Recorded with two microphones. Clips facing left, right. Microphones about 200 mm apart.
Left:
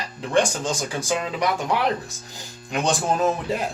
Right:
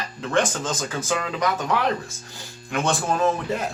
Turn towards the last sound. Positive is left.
turn(degrees=15)  # may be behind; listen again after turning